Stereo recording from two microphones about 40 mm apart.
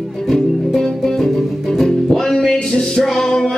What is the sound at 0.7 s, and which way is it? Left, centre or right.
Music, centre.